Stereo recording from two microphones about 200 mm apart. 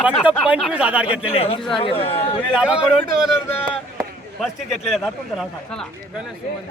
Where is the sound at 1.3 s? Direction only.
30° left (ahead or behind).